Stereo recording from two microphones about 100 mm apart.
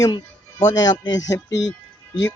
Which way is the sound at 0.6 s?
40° left (ahead or behind).